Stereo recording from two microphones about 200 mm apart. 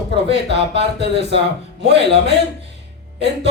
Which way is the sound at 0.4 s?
60° right (ahead or behind).